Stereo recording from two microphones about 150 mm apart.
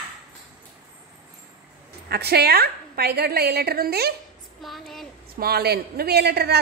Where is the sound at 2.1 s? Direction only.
90° right.